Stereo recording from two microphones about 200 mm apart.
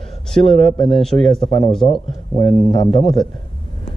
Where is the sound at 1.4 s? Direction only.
25° left (ahead or behind).